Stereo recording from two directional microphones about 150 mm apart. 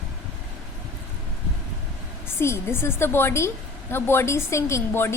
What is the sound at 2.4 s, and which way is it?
A woman's voice, 15° left (ahead or behind).